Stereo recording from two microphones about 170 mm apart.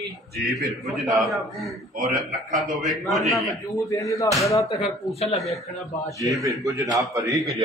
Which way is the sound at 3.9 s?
20° left (ahead or behind).